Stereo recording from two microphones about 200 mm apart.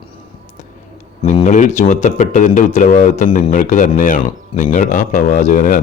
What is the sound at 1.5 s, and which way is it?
Speech, 40° left (ahead or behind).